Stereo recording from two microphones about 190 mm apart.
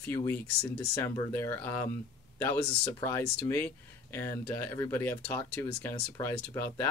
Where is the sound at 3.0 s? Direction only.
10° left (ahead or behind).